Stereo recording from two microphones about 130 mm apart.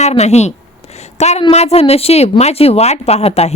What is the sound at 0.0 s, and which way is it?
A woman's voice, 60° left (ahead or behind).